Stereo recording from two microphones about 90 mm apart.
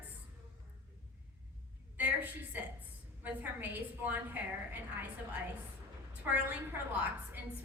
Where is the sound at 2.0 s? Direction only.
20° right (ahead or behind).